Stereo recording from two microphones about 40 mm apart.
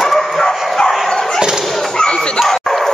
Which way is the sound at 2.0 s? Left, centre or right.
Left.